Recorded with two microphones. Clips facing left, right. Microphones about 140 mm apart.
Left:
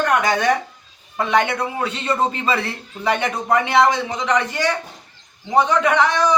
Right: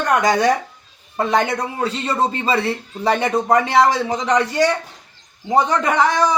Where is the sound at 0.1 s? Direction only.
35° right (ahead or behind).